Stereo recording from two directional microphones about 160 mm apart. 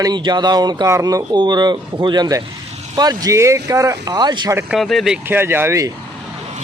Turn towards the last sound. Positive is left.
turn(degrees=-15)  # may be behind; listen again after turning